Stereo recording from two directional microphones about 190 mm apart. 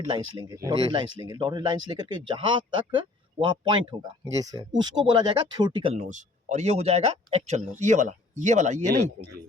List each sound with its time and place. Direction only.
0.1 s speech: 20° right (ahead or behind); by 8.8 s 40° right (ahead or behind)